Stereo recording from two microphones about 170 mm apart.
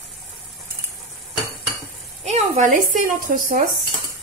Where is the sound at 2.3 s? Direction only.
45° right (ahead or behind).